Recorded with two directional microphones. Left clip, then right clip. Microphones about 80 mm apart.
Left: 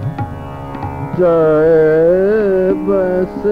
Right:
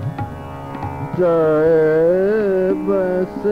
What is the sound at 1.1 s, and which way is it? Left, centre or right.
Music, left.